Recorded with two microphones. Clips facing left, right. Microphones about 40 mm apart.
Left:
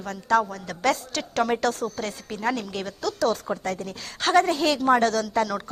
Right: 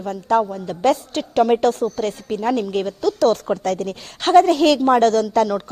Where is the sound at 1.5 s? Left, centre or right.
Right.